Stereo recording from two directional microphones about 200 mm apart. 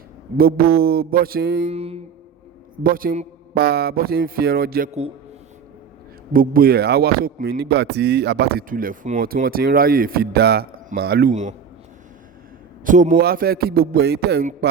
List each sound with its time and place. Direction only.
0.3 s speech: 50° right (ahead or behind)
1.7 s a man's voice: 30° right (ahead or behind)
2.8 s speech: 45° right (ahead or behind)
4.9 s a man's voice: 30° right (ahead or behind)
6.3 s speech: 45° right (ahead or behind)
12.8 s speech: 40° right (ahead or behind)